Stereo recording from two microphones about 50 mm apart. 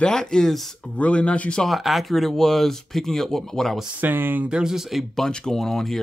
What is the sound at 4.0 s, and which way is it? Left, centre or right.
Speech, right.